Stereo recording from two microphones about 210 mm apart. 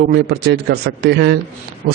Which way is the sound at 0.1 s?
50° right (ahead or behind).